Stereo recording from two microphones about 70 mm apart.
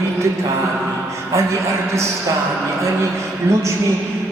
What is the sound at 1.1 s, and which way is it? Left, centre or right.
A man's voice, right.